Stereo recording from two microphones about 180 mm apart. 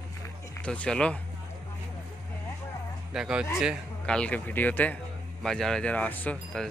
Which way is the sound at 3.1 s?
5° right (ahead or behind).